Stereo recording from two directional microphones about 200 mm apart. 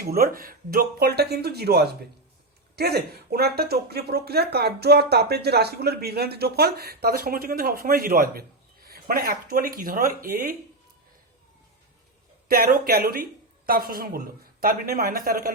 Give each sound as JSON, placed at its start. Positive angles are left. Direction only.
{"t": 0.0, "sound": "speech", "side_deg": -50}
{"t": 12.8, "sound": "speech", "side_deg": -50}